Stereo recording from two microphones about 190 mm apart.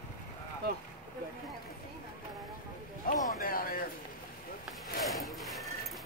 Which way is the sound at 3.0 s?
50° left (ahead or behind).